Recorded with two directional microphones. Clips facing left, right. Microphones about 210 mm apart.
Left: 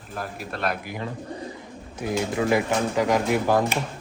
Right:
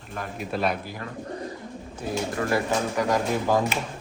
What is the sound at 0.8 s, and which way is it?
Speech, 20° left (ahead or behind).